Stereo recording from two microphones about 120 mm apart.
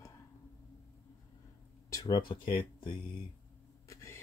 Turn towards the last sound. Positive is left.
turn(degrees=40)  # may be behind; listen again after turning